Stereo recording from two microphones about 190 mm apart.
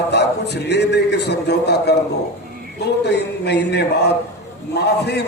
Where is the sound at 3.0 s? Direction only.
60° left (ahead or behind).